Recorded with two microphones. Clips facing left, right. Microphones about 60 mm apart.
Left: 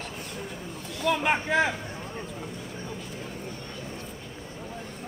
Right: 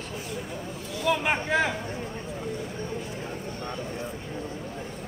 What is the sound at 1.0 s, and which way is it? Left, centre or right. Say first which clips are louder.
Speech: even; centre.